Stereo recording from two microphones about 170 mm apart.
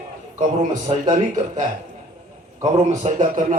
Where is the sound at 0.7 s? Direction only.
45° right (ahead or behind).